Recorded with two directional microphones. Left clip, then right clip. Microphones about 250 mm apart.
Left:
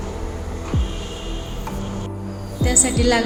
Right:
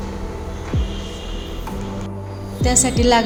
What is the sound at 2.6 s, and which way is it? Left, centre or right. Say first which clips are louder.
Speech: right 2 dB; centre.